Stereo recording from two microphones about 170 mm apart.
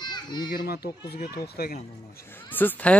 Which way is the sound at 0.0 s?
25° left (ahead or behind).